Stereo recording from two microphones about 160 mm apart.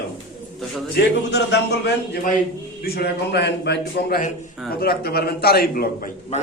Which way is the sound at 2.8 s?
80° left.